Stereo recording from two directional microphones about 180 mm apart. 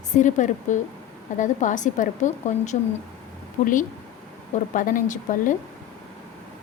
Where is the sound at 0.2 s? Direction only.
45° left (ahead or behind).